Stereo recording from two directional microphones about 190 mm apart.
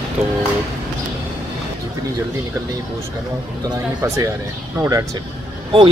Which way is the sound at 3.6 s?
15° right (ahead or behind).